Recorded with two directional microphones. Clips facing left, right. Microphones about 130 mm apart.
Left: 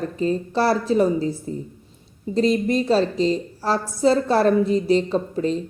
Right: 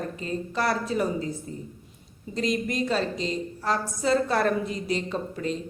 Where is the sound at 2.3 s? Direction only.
30° left (ahead or behind).